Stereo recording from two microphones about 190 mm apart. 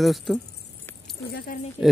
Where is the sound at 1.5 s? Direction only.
45° left (ahead or behind).